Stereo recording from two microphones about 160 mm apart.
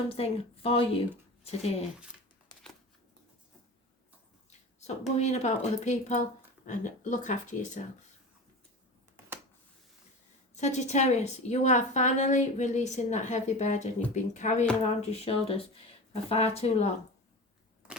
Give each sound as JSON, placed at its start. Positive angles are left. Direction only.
{"t": 0.1, "sound": "speech", "side_deg": 35}
{"t": 4.8, "sound": "a woman's voice", "side_deg": 45}
{"t": 10.5, "sound": "a woman's voice", "side_deg": 45}